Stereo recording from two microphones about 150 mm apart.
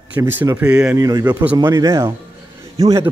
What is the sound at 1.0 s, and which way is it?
Speech, 25° right (ahead or behind).